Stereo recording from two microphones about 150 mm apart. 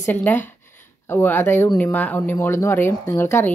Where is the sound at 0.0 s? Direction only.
10° left (ahead or behind).